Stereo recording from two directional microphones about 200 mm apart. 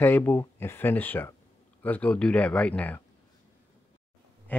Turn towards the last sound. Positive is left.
turn(degrees=10)  # may be behind; listen again after turning